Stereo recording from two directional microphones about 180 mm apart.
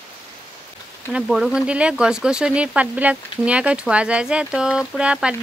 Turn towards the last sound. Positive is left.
turn(degrees=-5)  # may be behind; listen again after turning